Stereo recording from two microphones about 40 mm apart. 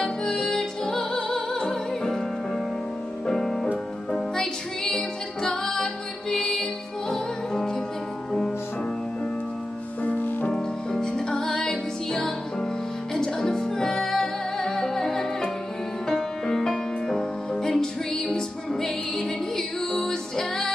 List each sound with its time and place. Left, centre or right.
0.0 s music: centre
10.0 s music: left
10.5 s music: centre